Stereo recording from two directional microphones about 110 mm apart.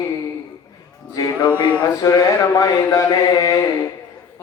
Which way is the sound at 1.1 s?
40° left (ahead or behind).